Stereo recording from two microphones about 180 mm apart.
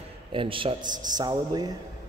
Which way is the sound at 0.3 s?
30° right (ahead or behind).